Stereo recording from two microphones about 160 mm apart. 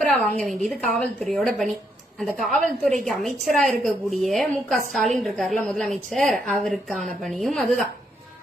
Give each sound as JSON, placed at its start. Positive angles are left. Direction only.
{"t": 0.1, "sound": "a woman's voice", "side_deg": 0}